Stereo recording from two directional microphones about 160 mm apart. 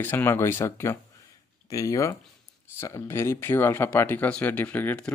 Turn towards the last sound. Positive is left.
turn(degrees=10)  # may be behind; listen again after turning